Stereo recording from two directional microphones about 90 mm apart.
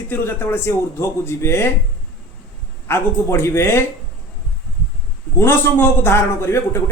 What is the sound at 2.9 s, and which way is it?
Speech, 30° left (ahead or behind).